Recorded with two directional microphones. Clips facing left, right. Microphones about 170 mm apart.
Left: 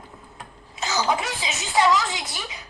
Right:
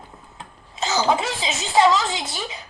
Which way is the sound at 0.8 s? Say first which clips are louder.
Right 3 dB; 25° right (ahead or behind).